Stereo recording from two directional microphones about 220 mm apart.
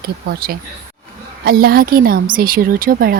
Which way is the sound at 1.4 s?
45° right (ahead or behind).